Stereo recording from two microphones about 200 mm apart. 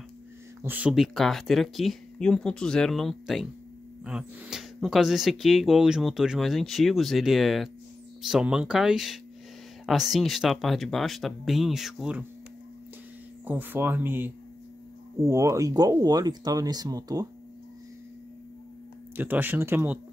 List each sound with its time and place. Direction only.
0.6 s speech: 10° right (ahead or behind)
13.5 s speech: 10° right (ahead or behind)
19.1 s speech: 10° right (ahead or behind)